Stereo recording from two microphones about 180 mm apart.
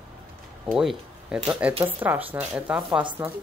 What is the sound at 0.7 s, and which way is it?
A woman's voice, centre (ahead or behind).